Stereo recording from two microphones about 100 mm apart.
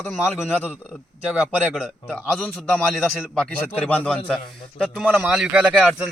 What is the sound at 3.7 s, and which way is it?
Speech, 15° left (ahead or behind).